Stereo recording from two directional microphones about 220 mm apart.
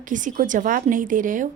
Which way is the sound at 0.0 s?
35° right (ahead or behind).